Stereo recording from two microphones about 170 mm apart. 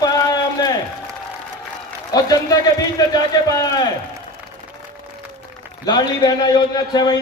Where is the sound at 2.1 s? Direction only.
20° left (ahead or behind).